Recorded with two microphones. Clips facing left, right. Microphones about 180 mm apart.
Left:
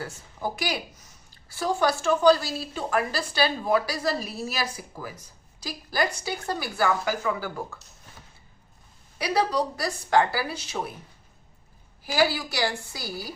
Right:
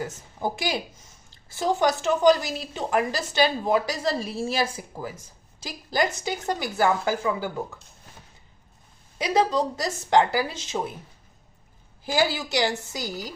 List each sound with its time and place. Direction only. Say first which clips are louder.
0.3 s a woman's voice: right 2 dB; 25° right (ahead or behind)
9.1 s a woman's voice: right 2 dB; 20° right (ahead or behind)
12.1 s a woman's voice: right 1 dB; 25° right (ahead or behind)